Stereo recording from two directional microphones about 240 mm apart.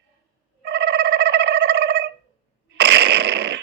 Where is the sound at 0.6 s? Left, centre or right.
Right.